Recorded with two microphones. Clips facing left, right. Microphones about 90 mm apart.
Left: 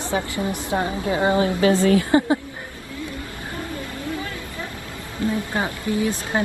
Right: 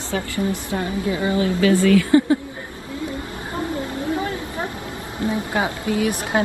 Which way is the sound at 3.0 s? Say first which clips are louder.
Right 5 dB; 25° right (ahead or behind).